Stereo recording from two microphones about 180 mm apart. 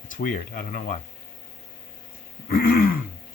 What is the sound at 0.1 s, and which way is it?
Speech, 50° left (ahead or behind).